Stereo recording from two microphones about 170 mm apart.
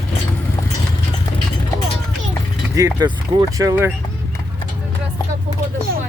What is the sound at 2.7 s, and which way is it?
Speech, 20° right (ahead or behind).